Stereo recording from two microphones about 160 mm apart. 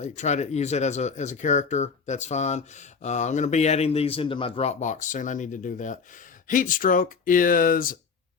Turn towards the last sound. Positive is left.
turn(degrees=60)  # may be behind; listen again after turning